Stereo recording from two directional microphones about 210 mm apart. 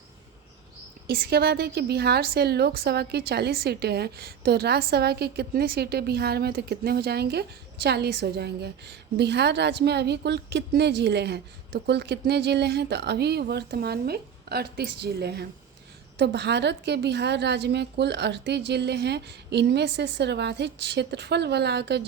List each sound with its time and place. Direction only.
1.0 s a woman's voice: 45° right (ahead or behind)